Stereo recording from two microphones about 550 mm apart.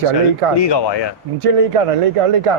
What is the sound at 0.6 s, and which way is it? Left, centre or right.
Speech, left.